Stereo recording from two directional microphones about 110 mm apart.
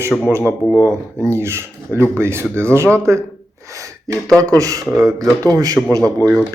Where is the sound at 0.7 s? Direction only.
25° left (ahead or behind).